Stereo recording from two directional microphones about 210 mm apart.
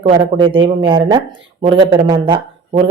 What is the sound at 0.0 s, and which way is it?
Speech, 25° right (ahead or behind).